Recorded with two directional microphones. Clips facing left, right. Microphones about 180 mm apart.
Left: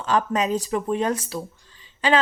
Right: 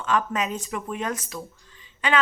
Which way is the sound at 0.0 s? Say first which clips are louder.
Left 3 dB; 35° left (ahead or behind).